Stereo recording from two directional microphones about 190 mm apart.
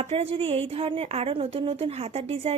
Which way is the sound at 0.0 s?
30° right (ahead or behind).